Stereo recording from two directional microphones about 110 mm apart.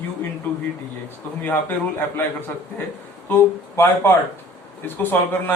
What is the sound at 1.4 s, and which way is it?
Speech, 20° left (ahead or behind).